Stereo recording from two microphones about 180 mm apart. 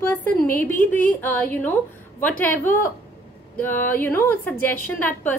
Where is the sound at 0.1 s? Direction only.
10° left (ahead or behind).